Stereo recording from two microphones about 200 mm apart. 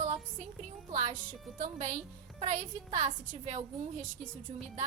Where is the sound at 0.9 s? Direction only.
40° right (ahead or behind).